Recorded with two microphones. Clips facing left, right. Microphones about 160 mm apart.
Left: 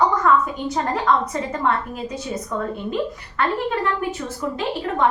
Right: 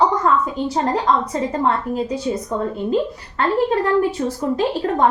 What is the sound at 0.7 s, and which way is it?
A woman's voice, 30° right (ahead or behind).